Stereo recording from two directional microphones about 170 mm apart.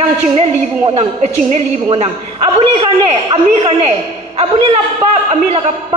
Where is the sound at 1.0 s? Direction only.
40° right (ahead or behind).